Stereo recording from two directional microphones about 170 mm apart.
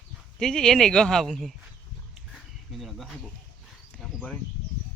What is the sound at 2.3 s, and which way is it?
Insect, centre (ahead or behind).